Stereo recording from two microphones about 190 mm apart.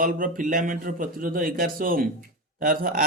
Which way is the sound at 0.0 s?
45° right (ahead or behind).